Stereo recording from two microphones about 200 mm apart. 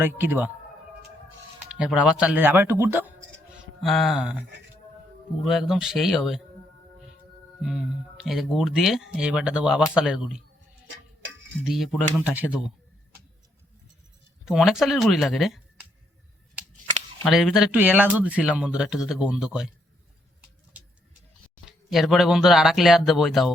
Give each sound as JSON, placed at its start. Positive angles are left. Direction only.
{"t": 0.0, "sound": "speech", "side_deg": -10}
{"t": 1.8, "sound": "speech", "side_deg": -5}
{"t": 3.5, "sound": "mantra", "side_deg": 0}
{"t": 5.4, "sound": "speech", "side_deg": 0}
{"t": 7.6, "sound": "speech", "side_deg": 0}
{"t": 10.8, "sound": "tick-tock", "side_deg": -70}
{"t": 11.6, "sound": "speech", "side_deg": 0}
{"t": 14.4, "sound": "speech", "side_deg": 0}
{"t": 17.2, "sound": "speech", "side_deg": 0}
{"t": 21.7, "sound": "speech", "side_deg": 0}